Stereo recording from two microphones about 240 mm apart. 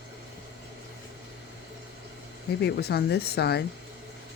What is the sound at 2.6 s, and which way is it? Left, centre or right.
Speech, left.